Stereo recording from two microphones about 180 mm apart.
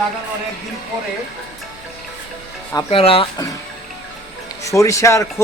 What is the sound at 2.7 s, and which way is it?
Speech, 30° left (ahead or behind).